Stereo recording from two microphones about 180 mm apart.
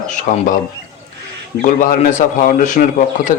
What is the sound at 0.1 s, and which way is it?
Speech, 45° left (ahead or behind).